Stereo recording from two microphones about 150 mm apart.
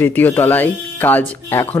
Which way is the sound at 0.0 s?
15° left (ahead or behind).